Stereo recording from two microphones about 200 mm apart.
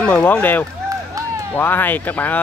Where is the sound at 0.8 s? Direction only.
15° right (ahead or behind).